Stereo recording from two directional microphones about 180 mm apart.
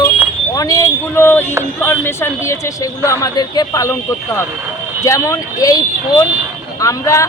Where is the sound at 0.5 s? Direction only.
20° left (ahead or behind).